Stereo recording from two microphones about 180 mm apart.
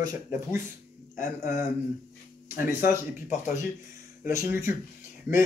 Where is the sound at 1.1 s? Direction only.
45° left (ahead or behind).